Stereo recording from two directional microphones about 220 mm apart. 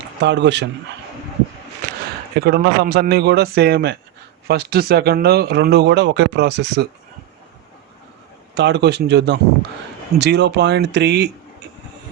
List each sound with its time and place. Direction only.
0.2 s speech: 50° right (ahead or behind)
2.4 s speech: 45° right (ahead or behind)
8.5 s speech: 50° right (ahead or behind)